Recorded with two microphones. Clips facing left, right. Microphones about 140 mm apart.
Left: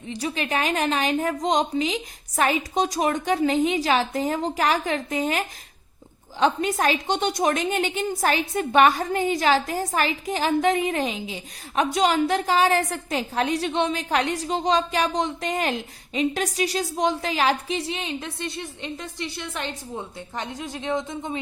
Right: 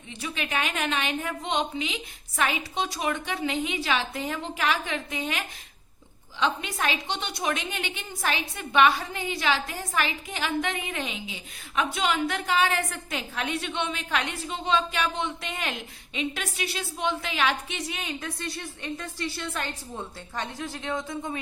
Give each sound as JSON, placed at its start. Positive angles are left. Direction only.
{"t": 0.1, "sound": "a woman's voice", "side_deg": 35}